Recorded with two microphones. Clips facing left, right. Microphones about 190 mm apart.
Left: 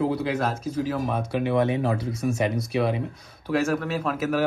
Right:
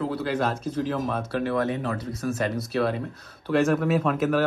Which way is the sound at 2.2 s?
15° left (ahead or behind).